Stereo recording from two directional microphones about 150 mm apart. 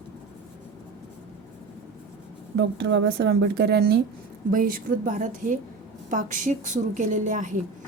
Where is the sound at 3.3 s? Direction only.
90° right.